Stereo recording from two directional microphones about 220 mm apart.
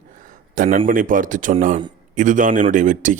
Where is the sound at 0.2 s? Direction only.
40° right (ahead or behind).